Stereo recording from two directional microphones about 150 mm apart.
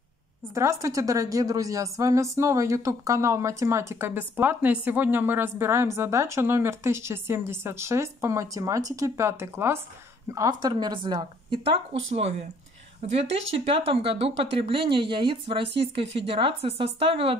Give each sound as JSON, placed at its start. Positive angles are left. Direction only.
{"t": 0.6, "sound": "a woman's voice", "side_deg": -20}